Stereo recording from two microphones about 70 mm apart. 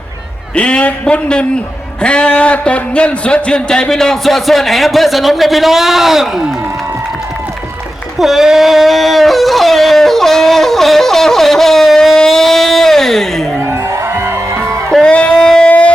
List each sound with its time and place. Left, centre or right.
0.5 s a man's voice: centre
8.2 s a sound: centre
13.6 s music: right
14.7 s music: centre